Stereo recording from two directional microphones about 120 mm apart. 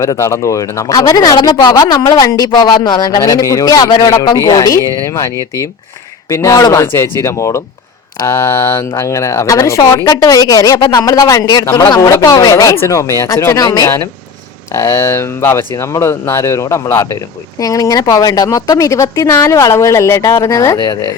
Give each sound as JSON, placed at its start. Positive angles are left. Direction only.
{"t": 0.0, "sound": "a man's voice", "side_deg": 25}
{"t": 20.7, "sound": "speech", "side_deg": 40}